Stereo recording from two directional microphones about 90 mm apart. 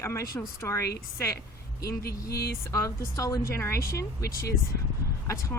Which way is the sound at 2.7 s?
35° left (ahead or behind).